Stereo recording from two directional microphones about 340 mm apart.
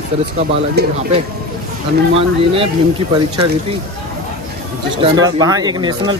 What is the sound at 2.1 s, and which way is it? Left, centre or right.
Speech, centre.